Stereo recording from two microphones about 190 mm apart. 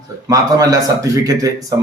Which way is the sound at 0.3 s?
20° right (ahead or behind).